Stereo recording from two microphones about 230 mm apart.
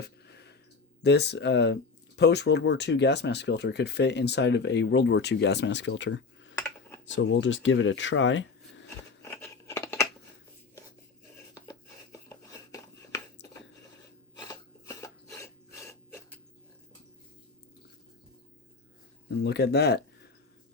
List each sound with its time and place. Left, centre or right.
0.0 s a sound: left
1.0 s speech: left
9.2 s scissors: centre
12.3 s a sound: centre
14.3 s filing: centre
19.4 s speech: left